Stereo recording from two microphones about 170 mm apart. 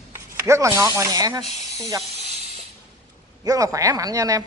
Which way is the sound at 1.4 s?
40° left (ahead or behind).